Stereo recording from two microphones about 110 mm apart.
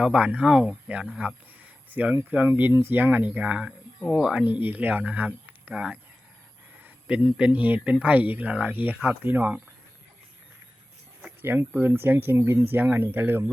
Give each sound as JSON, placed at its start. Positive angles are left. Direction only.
{"t": 0.0, "sound": "speech", "side_deg": -10}
{"t": 11.4, "sound": "speech", "side_deg": -15}